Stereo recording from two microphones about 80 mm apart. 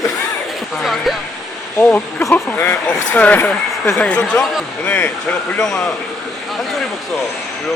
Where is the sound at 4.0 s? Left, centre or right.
Centre.